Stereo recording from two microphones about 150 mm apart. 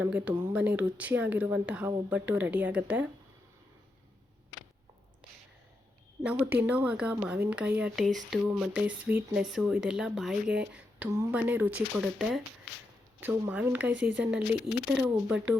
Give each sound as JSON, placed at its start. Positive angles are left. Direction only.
{"t": 0.0, "sound": "speech", "side_deg": -5}
{"t": 6.4, "sound": "speech", "side_deg": -10}
{"t": 11.1, "sound": "speech", "side_deg": -20}
{"t": 13.1, "sound": "speech", "side_deg": -10}